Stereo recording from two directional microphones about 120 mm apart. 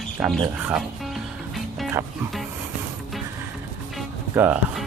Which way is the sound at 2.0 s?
25° right (ahead or behind).